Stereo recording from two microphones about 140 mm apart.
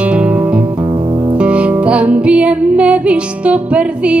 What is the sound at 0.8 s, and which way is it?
Music, 35° right (ahead or behind).